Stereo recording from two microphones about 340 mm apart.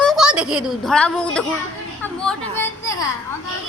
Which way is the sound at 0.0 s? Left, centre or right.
Centre.